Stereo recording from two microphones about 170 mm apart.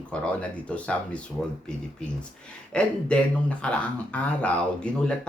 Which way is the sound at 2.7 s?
5° left (ahead or behind).